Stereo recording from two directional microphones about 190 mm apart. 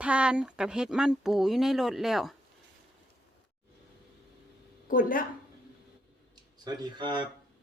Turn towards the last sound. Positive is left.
turn(degrees=-25)  # may be behind; listen again after turning